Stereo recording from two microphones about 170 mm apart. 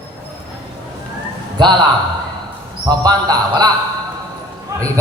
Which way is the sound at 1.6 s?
25° right (ahead or behind).